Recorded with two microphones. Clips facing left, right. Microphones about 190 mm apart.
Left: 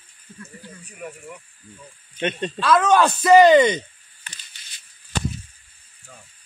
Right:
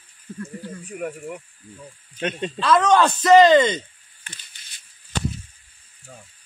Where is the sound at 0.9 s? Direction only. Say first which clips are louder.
Right 6 dB; 55° right (ahead or behind).